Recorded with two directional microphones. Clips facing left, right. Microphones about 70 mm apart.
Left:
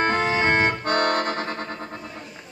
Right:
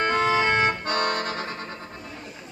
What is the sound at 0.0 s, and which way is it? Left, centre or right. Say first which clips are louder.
Accordion: even; left.